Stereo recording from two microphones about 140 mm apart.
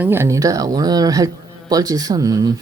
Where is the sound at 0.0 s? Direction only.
15° right (ahead or behind).